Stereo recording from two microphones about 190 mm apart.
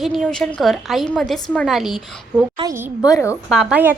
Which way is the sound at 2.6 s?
15° right (ahead or behind).